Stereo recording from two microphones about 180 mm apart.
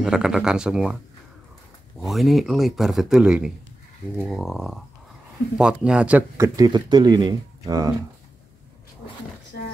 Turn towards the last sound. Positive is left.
turn(degrees=-20)  # may be behind; listen again after turning